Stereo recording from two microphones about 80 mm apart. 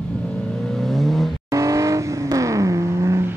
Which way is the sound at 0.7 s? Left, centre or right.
Centre.